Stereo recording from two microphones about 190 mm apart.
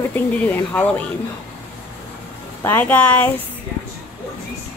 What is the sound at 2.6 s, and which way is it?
Speech, 10° left (ahead or behind).